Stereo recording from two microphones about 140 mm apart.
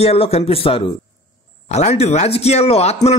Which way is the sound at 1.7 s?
50° left (ahead or behind).